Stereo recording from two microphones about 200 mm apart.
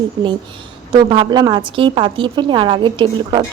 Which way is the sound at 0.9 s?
25° right (ahead or behind).